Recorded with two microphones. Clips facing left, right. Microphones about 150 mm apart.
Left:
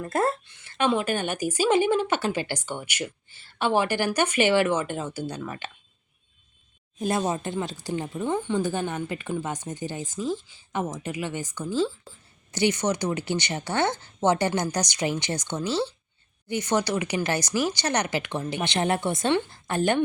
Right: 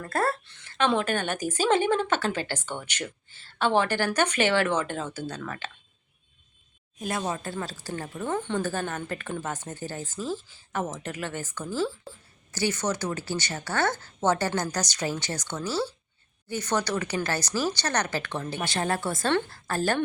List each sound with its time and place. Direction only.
0.0 s a woman's voice: 20° left (ahead or behind)
7.2 s a woman's voice: 20° left (ahead or behind)